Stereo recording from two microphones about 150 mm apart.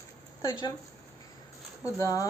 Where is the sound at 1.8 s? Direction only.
20° left (ahead or behind).